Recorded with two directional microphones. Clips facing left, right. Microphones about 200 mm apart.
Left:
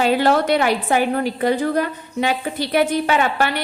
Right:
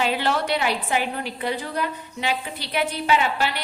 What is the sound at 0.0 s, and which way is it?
A woman's voice, 45° left (ahead or behind).